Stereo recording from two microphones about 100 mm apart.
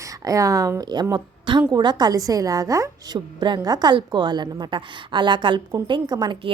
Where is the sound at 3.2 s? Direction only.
45° right (ahead or behind).